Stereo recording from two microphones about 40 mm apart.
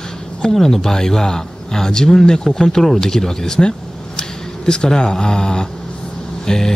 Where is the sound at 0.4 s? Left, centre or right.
Centre.